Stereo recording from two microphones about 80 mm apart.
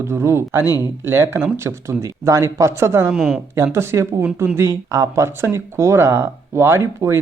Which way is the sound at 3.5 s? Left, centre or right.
Right.